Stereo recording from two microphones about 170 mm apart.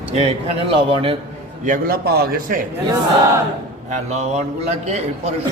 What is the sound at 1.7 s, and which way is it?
Speech, 60° right (ahead or behind).